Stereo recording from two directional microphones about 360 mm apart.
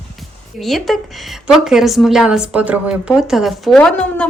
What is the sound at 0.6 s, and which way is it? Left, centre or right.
A woman's voice, centre.